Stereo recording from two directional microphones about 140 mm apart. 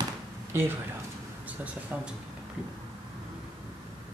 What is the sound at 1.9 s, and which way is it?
Speech, 10° right (ahead or behind).